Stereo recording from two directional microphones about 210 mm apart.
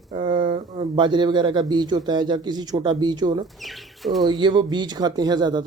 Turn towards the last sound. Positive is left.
turn(degrees=-20)  # may be behind; listen again after turning